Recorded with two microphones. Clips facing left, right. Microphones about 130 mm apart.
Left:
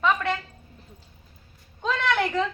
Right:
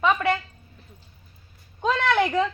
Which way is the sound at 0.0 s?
5° right (ahead or behind).